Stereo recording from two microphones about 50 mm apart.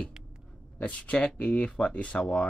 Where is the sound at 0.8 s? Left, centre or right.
Left.